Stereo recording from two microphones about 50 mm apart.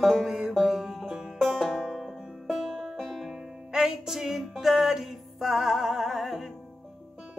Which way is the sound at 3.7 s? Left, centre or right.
Centre.